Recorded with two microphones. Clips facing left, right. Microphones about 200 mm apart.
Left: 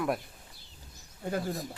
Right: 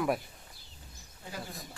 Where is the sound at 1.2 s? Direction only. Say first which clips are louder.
Left 11 dB; 55° left (ahead or behind).